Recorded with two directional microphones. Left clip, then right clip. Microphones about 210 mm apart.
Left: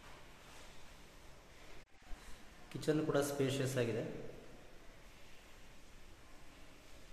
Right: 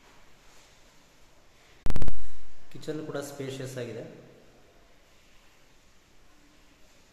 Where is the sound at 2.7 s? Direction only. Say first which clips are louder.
Even; 5° left (ahead or behind).